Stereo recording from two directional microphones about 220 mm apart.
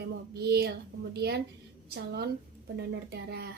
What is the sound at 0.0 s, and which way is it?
Speech, 45° right (ahead or behind).